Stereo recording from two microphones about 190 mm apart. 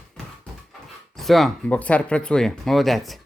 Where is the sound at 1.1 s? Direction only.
Centre (ahead or behind).